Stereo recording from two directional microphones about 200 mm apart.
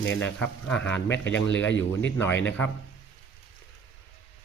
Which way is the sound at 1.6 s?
70° left (ahead or behind).